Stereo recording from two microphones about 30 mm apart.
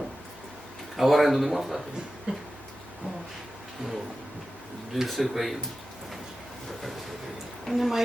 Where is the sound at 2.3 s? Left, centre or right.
Right.